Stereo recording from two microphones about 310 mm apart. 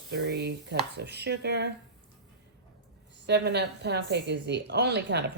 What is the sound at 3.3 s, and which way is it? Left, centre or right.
A woman's voice, right.